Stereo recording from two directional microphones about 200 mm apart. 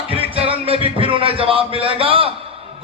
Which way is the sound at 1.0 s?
25° right (ahead or behind).